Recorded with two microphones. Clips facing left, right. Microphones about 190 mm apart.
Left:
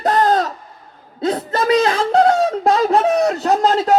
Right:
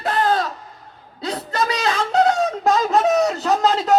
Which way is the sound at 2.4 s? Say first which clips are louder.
Left 3 dB; 30° left (ahead or behind).